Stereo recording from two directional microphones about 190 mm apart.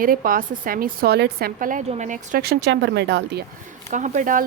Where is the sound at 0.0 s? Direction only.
45° right (ahead or behind); by 3.4 s 65° right (ahead or behind).